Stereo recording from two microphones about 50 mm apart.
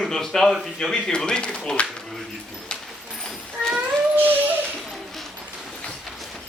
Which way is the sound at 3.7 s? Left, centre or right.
Right.